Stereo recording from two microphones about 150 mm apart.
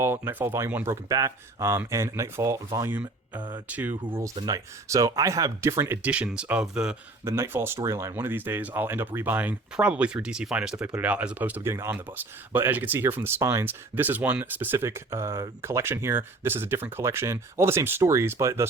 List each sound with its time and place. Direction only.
0.0 s speech: 15° right (ahead or behind)
4.4 s speech: 25° right (ahead or behind)